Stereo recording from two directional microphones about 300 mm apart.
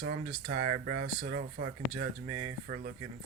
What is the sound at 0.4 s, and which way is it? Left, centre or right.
Speech, right.